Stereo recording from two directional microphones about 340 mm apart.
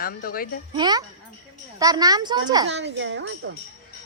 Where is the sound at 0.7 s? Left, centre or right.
Centre.